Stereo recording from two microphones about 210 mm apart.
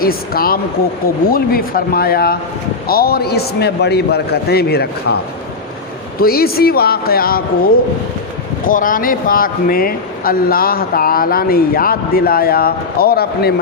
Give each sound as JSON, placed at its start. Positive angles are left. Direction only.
{"t": 0.0, "sound": "speech", "side_deg": 45}
{"t": 6.1, "sound": "speech", "side_deg": 45}
{"t": 8.6, "sound": "speech", "side_deg": 40}